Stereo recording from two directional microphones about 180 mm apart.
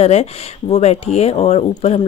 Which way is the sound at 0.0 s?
35° left (ahead or behind).